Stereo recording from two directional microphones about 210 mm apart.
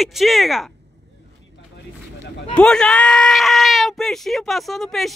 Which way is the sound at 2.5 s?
5° left (ahead or behind).